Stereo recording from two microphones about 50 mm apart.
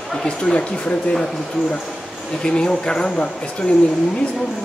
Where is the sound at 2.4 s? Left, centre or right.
Centre.